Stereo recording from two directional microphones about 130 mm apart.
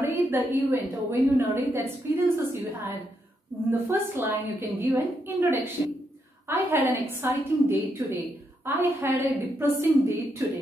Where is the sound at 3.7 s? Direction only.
15° right (ahead or behind).